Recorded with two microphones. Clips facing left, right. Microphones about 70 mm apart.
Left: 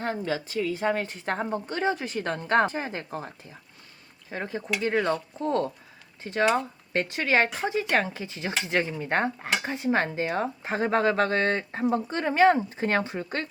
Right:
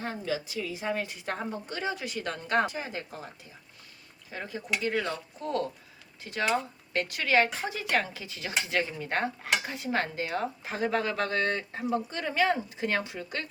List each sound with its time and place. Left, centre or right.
0.0 s speech: left
6.9 s cutlery: left
9.6 s speech: left